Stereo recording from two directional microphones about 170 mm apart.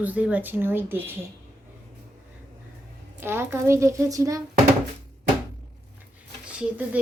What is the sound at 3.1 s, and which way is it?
Speech, 15° right (ahead or behind).